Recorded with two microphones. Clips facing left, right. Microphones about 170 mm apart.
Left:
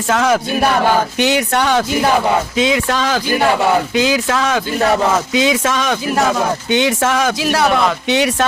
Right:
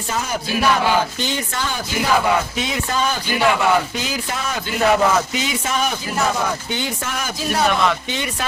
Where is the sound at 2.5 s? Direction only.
90° left.